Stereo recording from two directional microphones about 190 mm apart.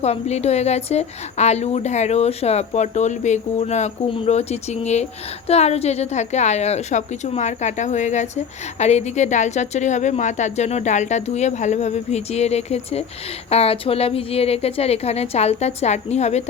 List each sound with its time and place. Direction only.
0.0 s speech: 35° left (ahead or behind)